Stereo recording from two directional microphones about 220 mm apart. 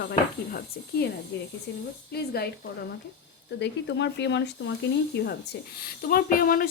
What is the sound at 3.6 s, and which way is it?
Speech, 55° left (ahead or behind).